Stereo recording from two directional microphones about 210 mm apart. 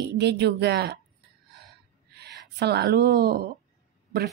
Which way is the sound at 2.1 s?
50° right (ahead or behind).